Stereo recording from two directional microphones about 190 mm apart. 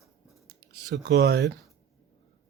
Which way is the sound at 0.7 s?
65° right (ahead or behind).